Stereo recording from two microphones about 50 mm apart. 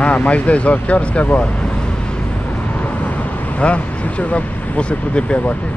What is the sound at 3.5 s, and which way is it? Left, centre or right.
Speech, left.